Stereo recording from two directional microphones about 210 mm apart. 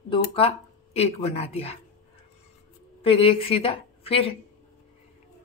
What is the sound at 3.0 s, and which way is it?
Speech, 25° left (ahead or behind).